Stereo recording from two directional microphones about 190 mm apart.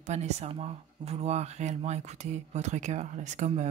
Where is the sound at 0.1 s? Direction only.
35° right (ahead or behind).